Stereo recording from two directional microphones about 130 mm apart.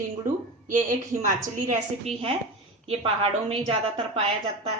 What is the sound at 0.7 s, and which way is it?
Speech, 85° right.